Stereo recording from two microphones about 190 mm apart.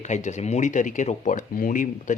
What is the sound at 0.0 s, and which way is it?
Speech, 40° left (ahead or behind).